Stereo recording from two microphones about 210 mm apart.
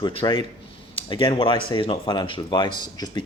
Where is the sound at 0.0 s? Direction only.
25° left (ahead or behind).